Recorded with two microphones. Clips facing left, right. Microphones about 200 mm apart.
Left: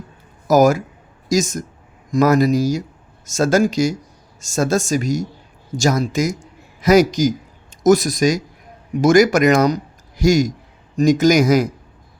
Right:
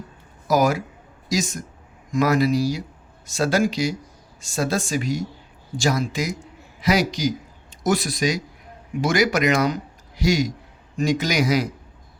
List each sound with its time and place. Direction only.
0.4 s a man's voice: 45° left (ahead or behind)